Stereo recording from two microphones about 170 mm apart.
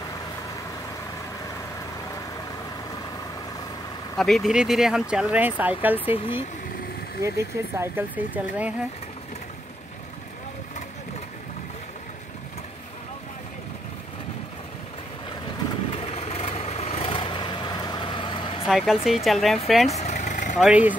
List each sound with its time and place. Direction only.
4.2 s speech: centre (ahead or behind)
5.9 s speech: 35° left (ahead or behind)
7.2 s speech: 15° right (ahead or behind)
15.9 s vehicle: 35° left (ahead or behind)
18.7 s speech: centre (ahead or behind)
19.9 s vehicle: 40° left (ahead or behind)
20.5 s speech: 5° right (ahead or behind)